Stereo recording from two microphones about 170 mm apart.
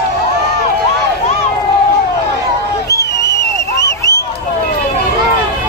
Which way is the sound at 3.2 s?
20° left (ahead or behind).